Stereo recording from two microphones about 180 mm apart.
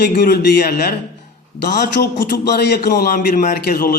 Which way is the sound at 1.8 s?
65° left (ahead or behind).